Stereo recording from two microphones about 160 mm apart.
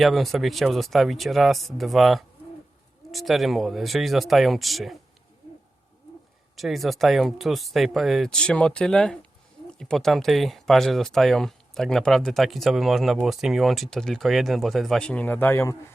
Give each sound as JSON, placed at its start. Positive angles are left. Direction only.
{"t": 0.0, "sound": "speech", "side_deg": 0}
{"t": 6.6, "sound": "speech", "side_deg": 0}